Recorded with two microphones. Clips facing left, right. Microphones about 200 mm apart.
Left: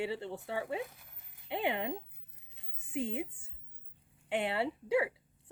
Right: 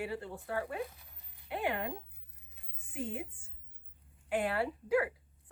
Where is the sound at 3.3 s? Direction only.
65° left (ahead or behind).